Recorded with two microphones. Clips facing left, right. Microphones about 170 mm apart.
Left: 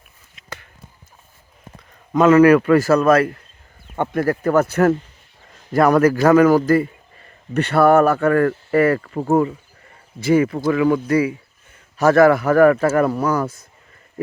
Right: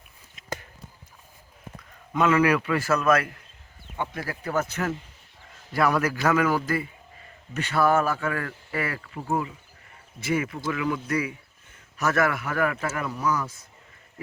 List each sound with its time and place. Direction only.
2.1 s speech: 40° left (ahead or behind)
3.9 s speech: 55° left (ahead or behind)
5.7 s speech: 45° left (ahead or behind)
7.5 s speech: 60° left (ahead or behind)
10.2 s speech: 35° left (ahead or behind); by 13.5 s 55° left (ahead or behind)